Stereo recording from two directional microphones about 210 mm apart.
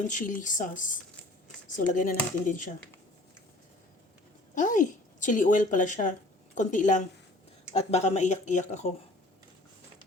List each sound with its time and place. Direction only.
0.1 s speech: 35° left (ahead or behind)
4.5 s speech: 40° left (ahead or behind)